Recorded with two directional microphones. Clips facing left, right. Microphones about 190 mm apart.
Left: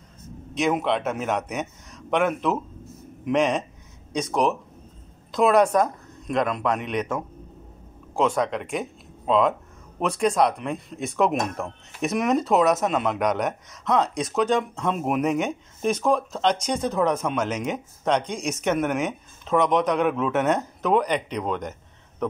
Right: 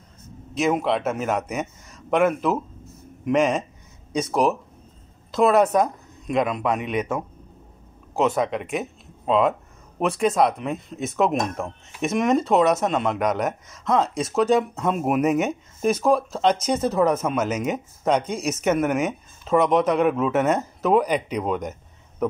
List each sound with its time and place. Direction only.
0.6 s speech: centre (ahead or behind)
8.4 s speech: centre (ahead or behind)